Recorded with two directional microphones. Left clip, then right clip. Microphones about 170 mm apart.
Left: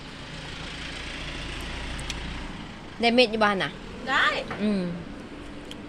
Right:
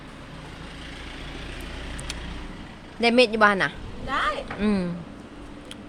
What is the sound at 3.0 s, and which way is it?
Speech, 20° right (ahead or behind).